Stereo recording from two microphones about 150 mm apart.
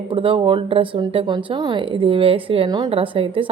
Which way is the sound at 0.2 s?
35° right (ahead or behind).